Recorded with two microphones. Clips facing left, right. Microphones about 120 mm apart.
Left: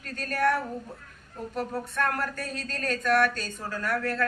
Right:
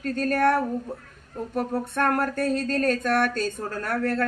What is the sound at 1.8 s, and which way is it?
A woman's voice, 55° right (ahead or behind).